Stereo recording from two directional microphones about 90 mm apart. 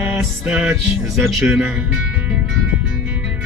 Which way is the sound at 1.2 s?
5° right (ahead or behind).